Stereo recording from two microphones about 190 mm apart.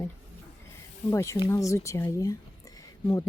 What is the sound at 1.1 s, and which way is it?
A woman's voice, 15° left (ahead or behind).